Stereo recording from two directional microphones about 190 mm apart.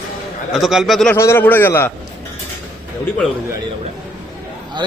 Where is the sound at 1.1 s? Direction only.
15° left (ahead or behind).